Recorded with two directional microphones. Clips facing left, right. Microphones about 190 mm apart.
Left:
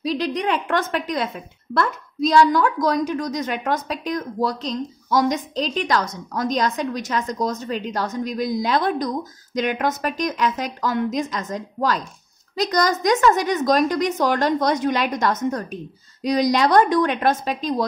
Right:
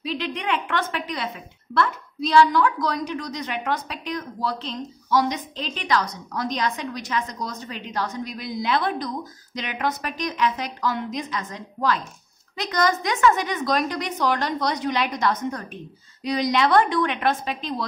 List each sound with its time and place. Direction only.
0.0 s a woman's voice: 40° left (ahead or behind)